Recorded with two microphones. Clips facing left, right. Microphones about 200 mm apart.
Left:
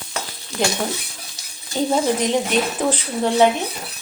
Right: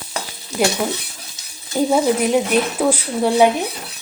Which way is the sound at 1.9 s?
10° right (ahead or behind).